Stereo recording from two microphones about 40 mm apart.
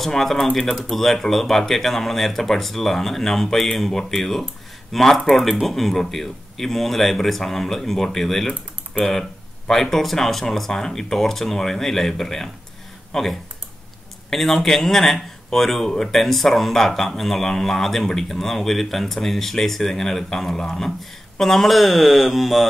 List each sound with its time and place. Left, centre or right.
0.0 s speech: centre
0.5 s speech: centre
0.7 s speech: centre
9.7 s speech: centre